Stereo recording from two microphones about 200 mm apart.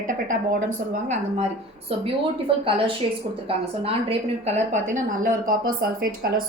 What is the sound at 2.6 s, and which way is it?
Speech, 25° right (ahead or behind).